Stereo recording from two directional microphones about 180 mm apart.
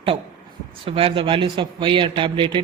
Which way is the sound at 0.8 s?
30° right (ahead or behind).